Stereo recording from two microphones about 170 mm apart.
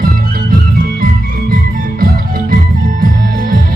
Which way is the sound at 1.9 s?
60° right (ahead or behind).